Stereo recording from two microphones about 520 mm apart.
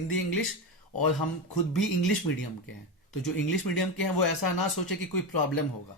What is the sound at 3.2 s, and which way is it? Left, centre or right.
Speech, left.